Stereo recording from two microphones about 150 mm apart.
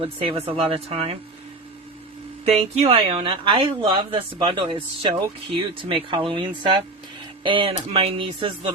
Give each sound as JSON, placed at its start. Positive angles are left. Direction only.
{"t": 0.0, "sound": "speech", "side_deg": -40}
{"t": 2.4, "sound": "speech", "side_deg": -45}